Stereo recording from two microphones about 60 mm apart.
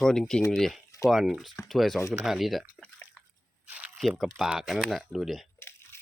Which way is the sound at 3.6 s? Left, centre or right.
Right.